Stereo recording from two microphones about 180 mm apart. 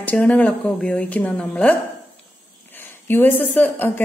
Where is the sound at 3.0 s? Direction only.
10° left (ahead or behind).